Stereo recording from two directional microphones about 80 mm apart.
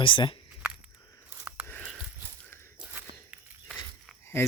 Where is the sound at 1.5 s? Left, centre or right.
Right.